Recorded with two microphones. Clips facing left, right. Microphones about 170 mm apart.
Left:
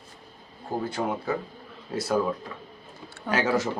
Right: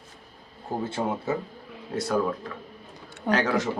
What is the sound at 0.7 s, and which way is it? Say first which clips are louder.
Speech: even; 20° right (ahead or behind).